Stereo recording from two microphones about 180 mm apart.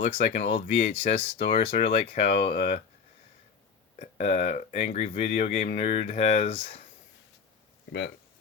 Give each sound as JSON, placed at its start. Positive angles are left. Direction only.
{"t": 0.0, "sound": "speech", "side_deg": 40}
{"t": 3.9, "sound": "speech", "side_deg": 45}